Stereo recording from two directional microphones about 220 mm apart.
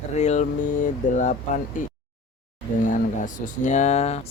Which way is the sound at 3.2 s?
35° left (ahead or behind).